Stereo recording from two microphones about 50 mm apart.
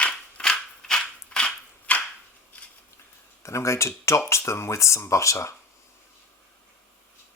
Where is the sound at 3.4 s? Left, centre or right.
Left.